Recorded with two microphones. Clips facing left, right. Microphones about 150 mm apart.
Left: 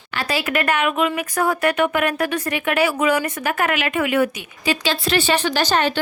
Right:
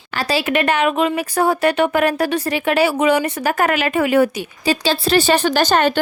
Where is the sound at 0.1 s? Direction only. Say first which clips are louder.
Right 4 dB; 35° right (ahead or behind).